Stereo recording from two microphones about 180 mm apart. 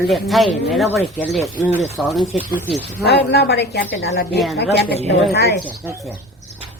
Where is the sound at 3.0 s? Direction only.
65° left (ahead or behind).